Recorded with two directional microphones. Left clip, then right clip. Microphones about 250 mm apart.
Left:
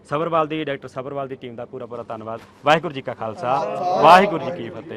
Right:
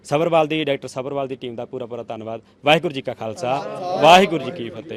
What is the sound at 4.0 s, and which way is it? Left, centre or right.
Speech, right.